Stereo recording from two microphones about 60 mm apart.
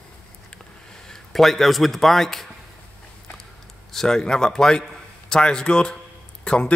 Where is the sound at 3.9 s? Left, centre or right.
Centre.